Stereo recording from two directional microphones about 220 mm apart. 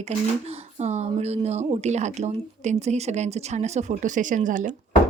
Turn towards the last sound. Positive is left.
turn(degrees=-35)  # may be behind; listen again after turning